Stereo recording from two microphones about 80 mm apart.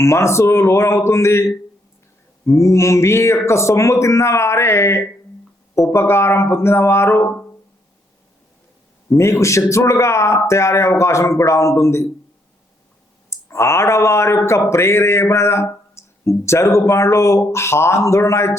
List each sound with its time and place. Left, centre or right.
0.0 s speech: left
9.0 s speech: left
13.3 s speech: left